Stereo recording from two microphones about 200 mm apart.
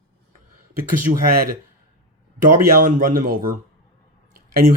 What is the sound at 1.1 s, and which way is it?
Speech, 45° right (ahead or behind).